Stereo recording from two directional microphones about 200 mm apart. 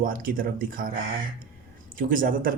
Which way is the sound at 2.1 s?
45° right (ahead or behind).